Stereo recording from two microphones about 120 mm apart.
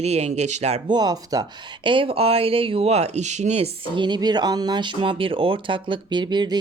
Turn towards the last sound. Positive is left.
turn(degrees=-40)  # may be behind; listen again after turning